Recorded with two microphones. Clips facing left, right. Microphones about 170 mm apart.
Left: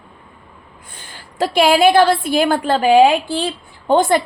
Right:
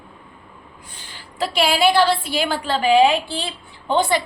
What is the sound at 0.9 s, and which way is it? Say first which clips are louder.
A woman's voice: left 5 dB; 50° left (ahead or behind).